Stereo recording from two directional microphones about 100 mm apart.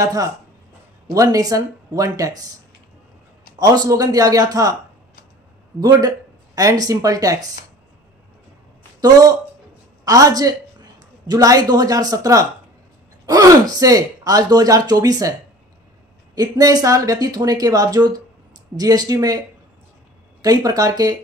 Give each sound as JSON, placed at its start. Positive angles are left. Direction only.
{"t": 0.0, "sound": "speech", "side_deg": -35}
{"t": 3.5, "sound": "speech", "side_deg": -40}
{"t": 5.8, "sound": "speech", "side_deg": -40}
{"t": 10.0, "sound": "speech", "side_deg": -35}
{"t": 16.3, "sound": "speech", "side_deg": -40}
{"t": 20.4, "sound": "speech", "side_deg": -40}